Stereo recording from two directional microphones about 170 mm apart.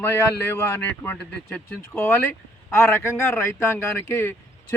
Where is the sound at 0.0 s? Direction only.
15° left (ahead or behind).